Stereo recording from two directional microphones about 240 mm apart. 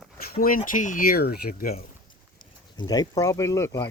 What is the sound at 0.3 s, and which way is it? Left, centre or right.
Speech, left.